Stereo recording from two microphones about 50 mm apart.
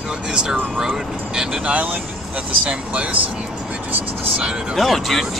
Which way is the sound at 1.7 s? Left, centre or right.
Right.